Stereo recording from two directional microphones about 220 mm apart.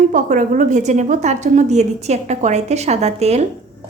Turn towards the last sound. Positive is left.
turn(degrees=-30)  # may be behind; listen again after turning